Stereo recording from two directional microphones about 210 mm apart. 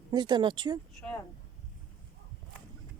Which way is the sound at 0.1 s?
20° right (ahead or behind).